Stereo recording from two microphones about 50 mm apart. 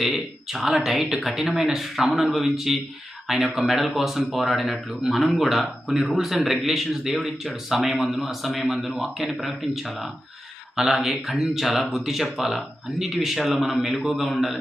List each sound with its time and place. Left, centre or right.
0.0 s speech: centre